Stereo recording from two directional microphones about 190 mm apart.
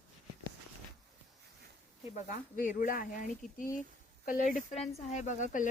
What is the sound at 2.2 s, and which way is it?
Speech, 45° left (ahead or behind).